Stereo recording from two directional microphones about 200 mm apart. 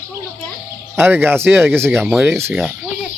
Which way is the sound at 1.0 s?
10° right (ahead or behind).